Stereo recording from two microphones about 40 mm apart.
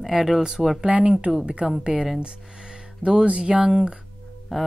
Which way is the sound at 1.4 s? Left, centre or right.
Right.